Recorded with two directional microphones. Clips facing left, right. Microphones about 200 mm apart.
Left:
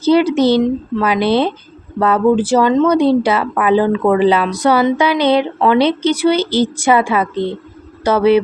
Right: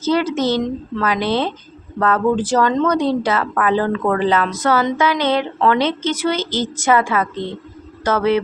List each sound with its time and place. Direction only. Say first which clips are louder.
0.0 s a woman's voice: left 6 dB; 15° left (ahead or behind)